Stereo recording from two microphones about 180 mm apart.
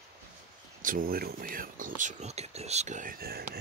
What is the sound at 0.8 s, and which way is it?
Speech, 50° right (ahead or behind).